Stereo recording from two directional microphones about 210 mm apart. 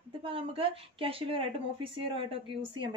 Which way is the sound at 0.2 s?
25° right (ahead or behind).